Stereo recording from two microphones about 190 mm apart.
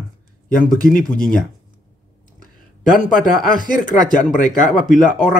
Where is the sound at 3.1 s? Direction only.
45° left (ahead or behind).